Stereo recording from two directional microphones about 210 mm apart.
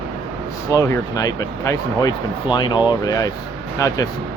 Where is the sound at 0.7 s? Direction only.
15° left (ahead or behind).